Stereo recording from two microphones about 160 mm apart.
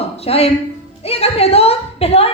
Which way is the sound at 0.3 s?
40° left (ahead or behind).